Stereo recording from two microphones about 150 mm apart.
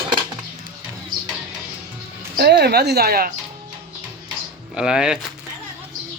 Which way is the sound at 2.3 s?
90° right.